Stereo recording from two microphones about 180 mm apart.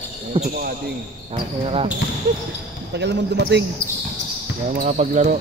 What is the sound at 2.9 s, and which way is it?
Speech, 70° right (ahead or behind).